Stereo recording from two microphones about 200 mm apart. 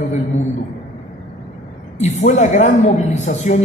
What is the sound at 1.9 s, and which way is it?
A man's voice, 35° left (ahead or behind).